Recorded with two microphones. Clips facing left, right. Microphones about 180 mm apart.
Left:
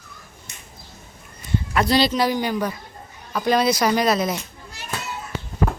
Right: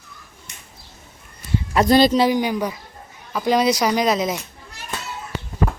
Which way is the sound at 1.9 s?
50° right (ahead or behind).